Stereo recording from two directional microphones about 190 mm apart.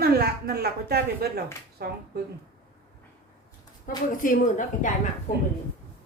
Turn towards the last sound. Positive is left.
turn(degrees=40)  # may be behind; listen again after turning